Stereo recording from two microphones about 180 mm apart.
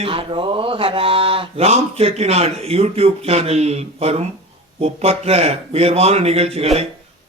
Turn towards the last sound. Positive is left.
turn(degrees=-35)  # may be behind; listen again after turning